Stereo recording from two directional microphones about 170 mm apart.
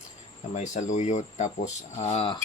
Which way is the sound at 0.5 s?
45° left (ahead or behind).